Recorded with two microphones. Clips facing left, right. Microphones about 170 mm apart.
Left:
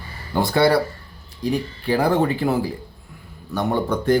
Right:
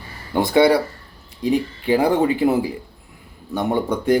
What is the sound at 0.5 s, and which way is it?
Speech, 20° right (ahead or behind).